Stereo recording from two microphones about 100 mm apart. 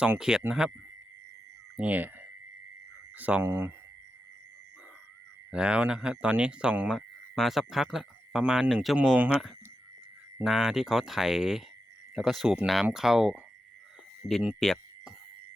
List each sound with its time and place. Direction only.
0.0 s speech: 10° right (ahead or behind)
1.7 s wind chime: 15° right (ahead or behind)
3.2 s speech: 15° right (ahead or behind)
5.5 s speech: 10° right (ahead or behind)
9.0 s speech: 10° right (ahead or behind)
10.4 s speech: 5° right (ahead or behind)
14.6 s a sound: centre (ahead or behind)